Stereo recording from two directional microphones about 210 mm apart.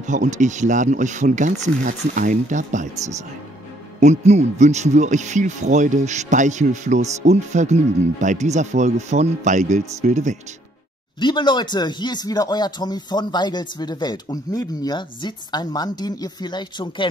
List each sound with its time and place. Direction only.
0.0 s speech: 35° right (ahead or behind)
4.0 s speech: 30° right (ahead or behind)
11.1 s speech: 20° left (ahead or behind)